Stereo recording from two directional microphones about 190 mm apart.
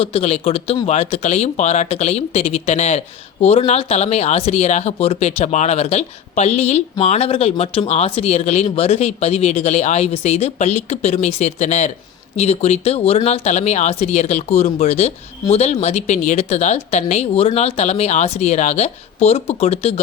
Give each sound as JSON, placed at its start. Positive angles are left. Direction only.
{"t": 0.0, "sound": "speech", "side_deg": 30}